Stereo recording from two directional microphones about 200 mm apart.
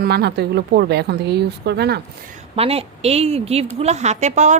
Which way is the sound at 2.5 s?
30° right (ahead or behind).